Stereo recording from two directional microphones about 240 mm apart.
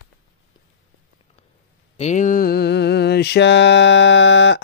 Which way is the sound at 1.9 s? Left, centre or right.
Left.